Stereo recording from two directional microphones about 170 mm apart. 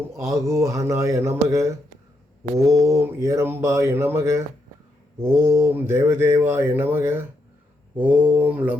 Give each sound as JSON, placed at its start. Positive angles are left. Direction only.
{"t": 0.2, "sound": "speech", "side_deg": -15}
{"t": 2.7, "sound": "speech", "side_deg": -15}